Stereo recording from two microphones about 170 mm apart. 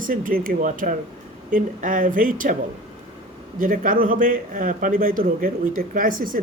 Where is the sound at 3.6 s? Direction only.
55° right (ahead or behind).